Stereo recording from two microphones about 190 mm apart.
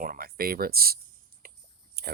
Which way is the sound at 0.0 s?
50° right (ahead or behind).